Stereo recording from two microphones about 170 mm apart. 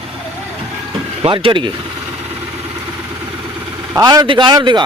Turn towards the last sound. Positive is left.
turn(degrees=-25)  # may be behind; listen again after turning